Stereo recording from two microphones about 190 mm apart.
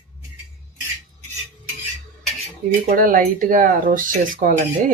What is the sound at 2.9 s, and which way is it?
Speech, 45° right (ahead or behind).